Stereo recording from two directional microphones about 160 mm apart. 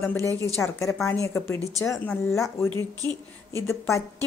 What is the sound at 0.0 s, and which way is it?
A woman's voice, 15° left (ahead or behind).